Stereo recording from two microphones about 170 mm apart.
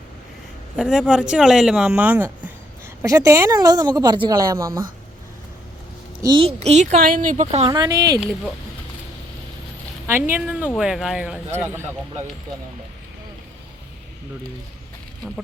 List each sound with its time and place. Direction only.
0.8 s a woman's voice: 5° right (ahead or behind)
6.2 s a woman's voice: 30° right (ahead or behind)
7.0 s speech: 55° right (ahead or behind)
7.7 s a woman's voice: 20° right (ahead or behind)
10.1 s speech: 15° right (ahead or behind)